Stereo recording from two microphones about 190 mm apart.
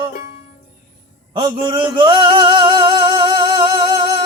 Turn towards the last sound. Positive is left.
turn(degrees=-20)  # may be behind; listen again after turning